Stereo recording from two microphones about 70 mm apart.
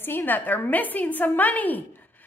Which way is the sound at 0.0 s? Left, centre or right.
Left.